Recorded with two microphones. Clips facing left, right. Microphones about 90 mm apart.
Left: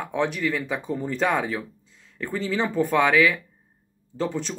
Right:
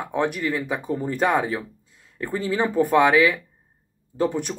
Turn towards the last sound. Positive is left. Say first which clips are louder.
# right 4 dB
turn(degrees=-15)  # may be behind; listen again after turning